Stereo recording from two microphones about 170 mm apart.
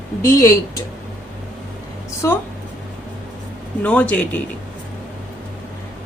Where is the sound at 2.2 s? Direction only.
20° left (ahead or behind).